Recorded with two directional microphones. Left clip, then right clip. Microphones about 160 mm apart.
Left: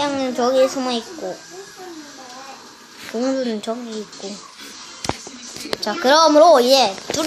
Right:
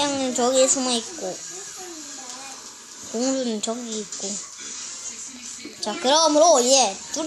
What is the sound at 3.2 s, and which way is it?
Speech, 20° right (ahead or behind).